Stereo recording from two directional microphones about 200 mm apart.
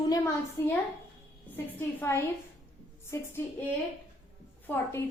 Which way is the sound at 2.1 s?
10° left (ahead or behind).